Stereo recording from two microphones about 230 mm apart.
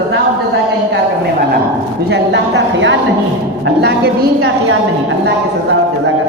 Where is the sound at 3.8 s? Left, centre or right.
Right.